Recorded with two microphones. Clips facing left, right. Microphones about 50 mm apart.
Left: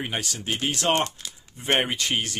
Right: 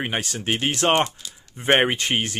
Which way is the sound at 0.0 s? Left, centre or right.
Right.